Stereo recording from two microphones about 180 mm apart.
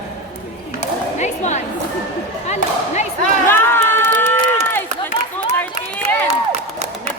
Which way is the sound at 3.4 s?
15° left (ahead or behind).